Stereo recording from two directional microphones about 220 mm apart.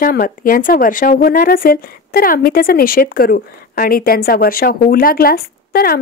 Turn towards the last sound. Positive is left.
turn(degrees=45)  # may be behind; listen again after turning